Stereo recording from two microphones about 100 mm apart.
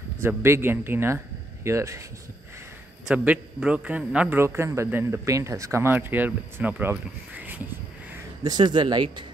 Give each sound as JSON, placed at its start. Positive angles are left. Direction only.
{"t": 0.2, "sound": "speech", "side_deg": -25}
{"t": 3.1, "sound": "a man's voice", "side_deg": -10}
{"t": 4.4, "sound": "speech", "side_deg": -25}
{"t": 8.5, "sound": "speech", "side_deg": -50}